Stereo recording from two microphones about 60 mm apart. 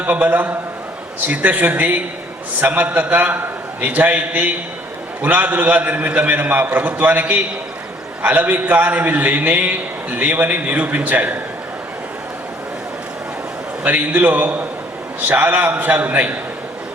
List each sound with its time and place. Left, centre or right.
0.0 s a man's voice: right
13.8 s a man's voice: right